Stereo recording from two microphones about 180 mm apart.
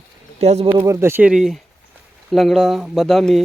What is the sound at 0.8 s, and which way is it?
Speech, 15° right (ahead or behind).